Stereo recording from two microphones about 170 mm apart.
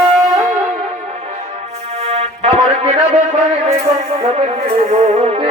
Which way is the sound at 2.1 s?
35° right (ahead or behind).